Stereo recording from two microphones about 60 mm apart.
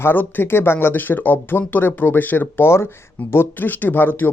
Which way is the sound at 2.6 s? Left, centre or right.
Left.